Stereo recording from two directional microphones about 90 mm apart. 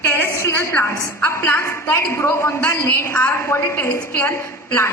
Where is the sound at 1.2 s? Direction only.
20° left (ahead or behind).